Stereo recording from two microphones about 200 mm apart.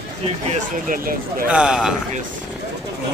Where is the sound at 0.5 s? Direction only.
45° right (ahead or behind).